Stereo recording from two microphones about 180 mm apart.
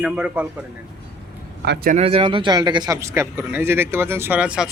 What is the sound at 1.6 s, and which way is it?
Speech, 70° right (ahead or behind).